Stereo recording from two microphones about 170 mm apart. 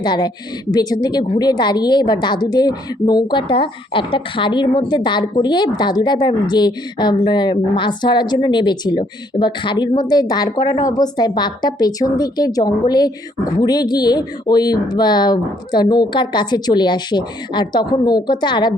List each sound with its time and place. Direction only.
0.0 s a woman's voice: 25° left (ahead or behind)